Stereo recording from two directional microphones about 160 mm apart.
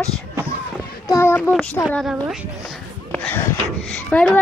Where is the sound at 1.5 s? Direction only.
5° left (ahead or behind).